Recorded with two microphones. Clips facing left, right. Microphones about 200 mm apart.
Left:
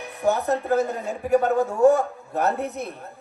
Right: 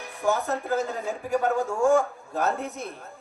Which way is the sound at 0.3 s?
60° left (ahead or behind).